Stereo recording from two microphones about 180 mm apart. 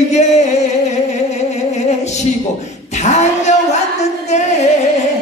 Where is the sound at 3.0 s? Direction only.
40° left (ahead or behind).